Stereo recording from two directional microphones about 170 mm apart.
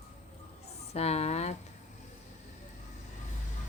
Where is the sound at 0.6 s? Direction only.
40° left (ahead or behind).